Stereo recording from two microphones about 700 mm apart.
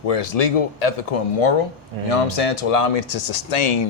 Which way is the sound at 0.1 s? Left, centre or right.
Left.